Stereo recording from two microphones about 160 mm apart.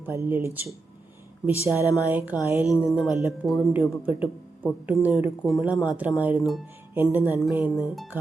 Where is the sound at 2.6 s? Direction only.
20° left (ahead or behind).